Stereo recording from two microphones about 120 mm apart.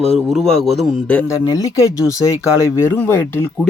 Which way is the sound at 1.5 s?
30° left (ahead or behind).